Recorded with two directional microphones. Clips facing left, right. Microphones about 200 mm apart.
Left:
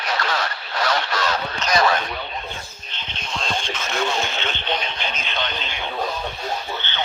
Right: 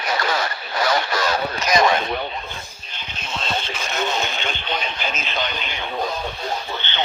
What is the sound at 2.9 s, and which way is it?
Radio, 5° right (ahead or behind).